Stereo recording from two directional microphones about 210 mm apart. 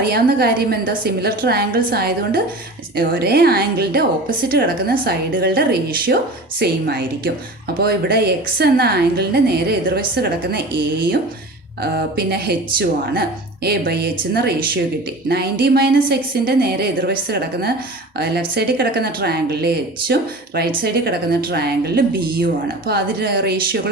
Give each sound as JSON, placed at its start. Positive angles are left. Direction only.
{"t": 0.0, "sound": "a woman's voice", "side_deg": -45}
{"t": 11.8, "sound": "a woman's voice", "side_deg": -45}